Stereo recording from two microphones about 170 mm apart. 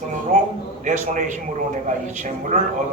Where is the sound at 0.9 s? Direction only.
45° right (ahead or behind).